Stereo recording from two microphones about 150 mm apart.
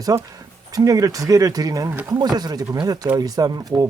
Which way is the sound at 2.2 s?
25° right (ahead or behind).